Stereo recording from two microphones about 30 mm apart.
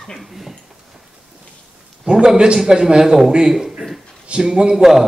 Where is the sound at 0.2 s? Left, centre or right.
Centre.